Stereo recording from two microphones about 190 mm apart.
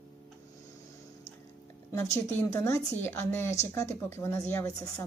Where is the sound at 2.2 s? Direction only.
15° left (ahead or behind).